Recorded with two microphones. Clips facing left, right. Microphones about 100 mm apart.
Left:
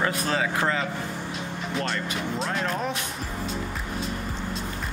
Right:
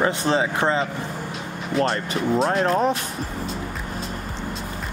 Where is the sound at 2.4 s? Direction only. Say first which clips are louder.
Right 8 dB; 40° right (ahead or behind).